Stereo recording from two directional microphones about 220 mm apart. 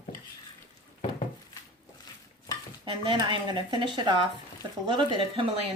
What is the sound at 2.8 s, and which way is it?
Speech, 20° right (ahead or behind).